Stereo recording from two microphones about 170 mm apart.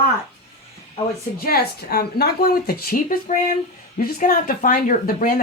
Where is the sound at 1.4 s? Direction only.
65° left (ahead or behind).